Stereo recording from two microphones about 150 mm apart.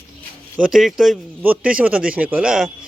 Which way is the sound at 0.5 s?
5° right (ahead or behind).